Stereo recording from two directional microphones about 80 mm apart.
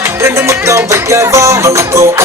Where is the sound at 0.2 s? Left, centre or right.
Right.